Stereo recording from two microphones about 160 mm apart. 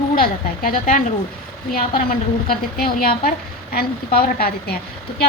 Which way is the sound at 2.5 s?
65° left (ahead or behind).